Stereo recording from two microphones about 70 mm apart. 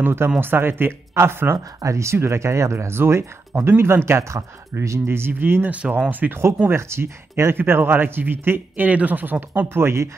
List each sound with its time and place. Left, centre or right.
0.0 s speech: right
1.8 s speech: right
6.7 s speech: right
9.8 s speech: right